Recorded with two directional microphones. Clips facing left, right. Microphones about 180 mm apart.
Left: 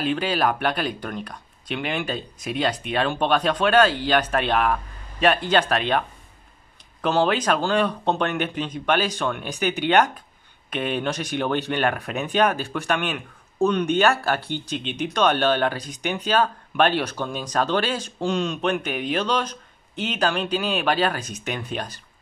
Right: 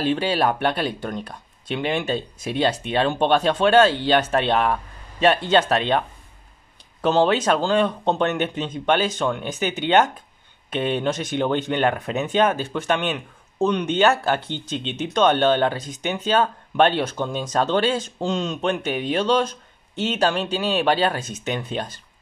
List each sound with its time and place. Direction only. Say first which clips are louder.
0.0 s speech: right 2 dB; 30° right (ahead or behind)